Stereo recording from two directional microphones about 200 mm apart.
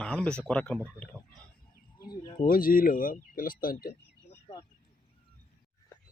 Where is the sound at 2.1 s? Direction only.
20° left (ahead or behind).